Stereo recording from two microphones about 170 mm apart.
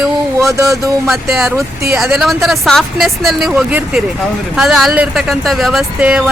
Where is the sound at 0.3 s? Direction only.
20° right (ahead or behind).